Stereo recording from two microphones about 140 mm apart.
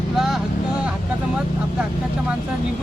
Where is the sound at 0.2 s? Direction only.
Centre (ahead or behind).